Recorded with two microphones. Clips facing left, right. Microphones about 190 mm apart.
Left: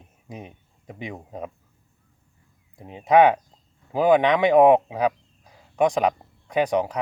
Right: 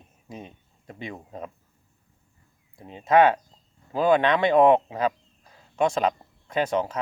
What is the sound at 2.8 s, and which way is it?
Speech, 15° left (ahead or behind).